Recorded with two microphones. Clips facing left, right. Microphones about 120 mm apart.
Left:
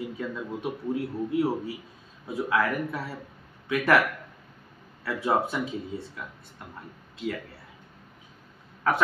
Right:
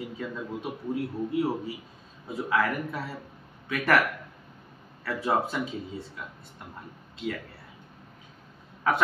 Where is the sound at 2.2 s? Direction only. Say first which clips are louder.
Left 1 dB; 5° left (ahead or behind).